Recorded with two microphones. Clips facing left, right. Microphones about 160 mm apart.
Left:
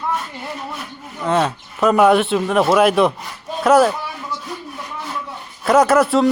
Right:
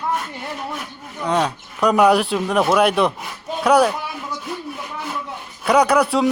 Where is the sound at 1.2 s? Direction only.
Centre (ahead or behind).